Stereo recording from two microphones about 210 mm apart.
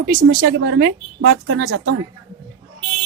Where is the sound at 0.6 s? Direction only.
55° right (ahead or behind); by 2.0 s 80° right.